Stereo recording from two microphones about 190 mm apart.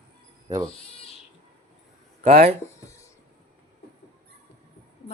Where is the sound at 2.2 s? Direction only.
50° right (ahead or behind).